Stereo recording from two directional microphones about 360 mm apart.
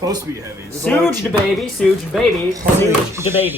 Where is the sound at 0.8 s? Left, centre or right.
Centre.